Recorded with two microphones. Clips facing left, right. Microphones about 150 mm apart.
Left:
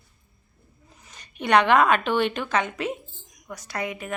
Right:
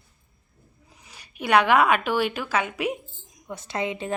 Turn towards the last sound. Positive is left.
turn(degrees=-25)  # may be behind; listen again after turning